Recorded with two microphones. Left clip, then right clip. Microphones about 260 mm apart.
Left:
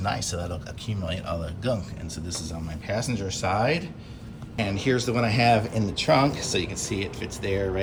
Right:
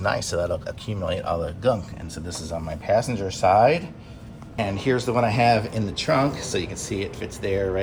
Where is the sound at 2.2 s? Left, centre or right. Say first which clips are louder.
Even; left.